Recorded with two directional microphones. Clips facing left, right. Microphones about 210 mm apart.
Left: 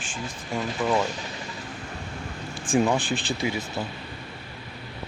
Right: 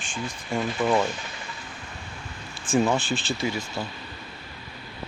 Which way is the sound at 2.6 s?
15° left (ahead or behind).